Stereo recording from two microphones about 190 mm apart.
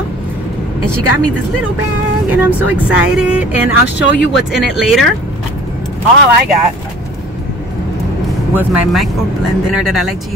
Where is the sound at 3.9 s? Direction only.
65° left (ahead or behind).